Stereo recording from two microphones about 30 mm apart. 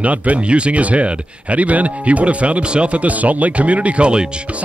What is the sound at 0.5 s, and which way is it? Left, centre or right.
Speech, right.